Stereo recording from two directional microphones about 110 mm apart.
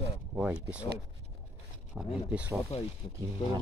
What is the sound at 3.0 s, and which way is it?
Speech, 50° left (ahead or behind).